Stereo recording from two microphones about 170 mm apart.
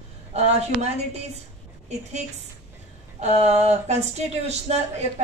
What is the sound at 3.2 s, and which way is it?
A woman's voice, 40° right (ahead or behind).